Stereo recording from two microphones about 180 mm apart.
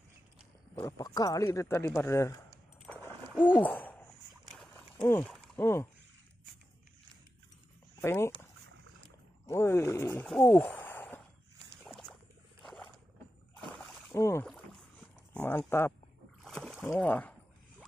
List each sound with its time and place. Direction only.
0.7 s speech: 20° left (ahead or behind)
2.8 s a sound: 10° left (ahead or behind)
5.0 s speech: 15° left (ahead or behind)
8.0 s speech: 15° left (ahead or behind)
9.5 s speech: 15° left (ahead or behind)
10.8 s a sound: 10° left (ahead or behind)
11.8 s rowboat: centre (ahead or behind)
13.7 s rowboat: centre (ahead or behind)
14.1 s speech: 15° left (ahead or behind)
14.4 s rowboat: centre (ahead or behind)
15.4 s speech: 10° left (ahead or behind)
16.4 s splash: centre (ahead or behind)
17.0 s a sound: 5° left (ahead or behind)